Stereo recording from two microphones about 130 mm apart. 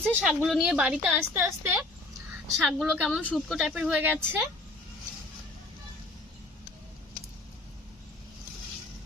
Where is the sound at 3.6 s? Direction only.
5° right (ahead or behind).